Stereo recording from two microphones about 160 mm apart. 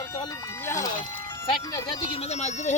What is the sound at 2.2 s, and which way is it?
Speech, 45° left (ahead or behind).